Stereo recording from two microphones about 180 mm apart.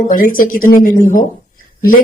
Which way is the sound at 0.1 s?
50° left (ahead or behind).